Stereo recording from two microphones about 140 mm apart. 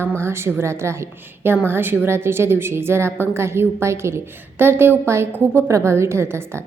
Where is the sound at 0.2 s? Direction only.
20° right (ahead or behind).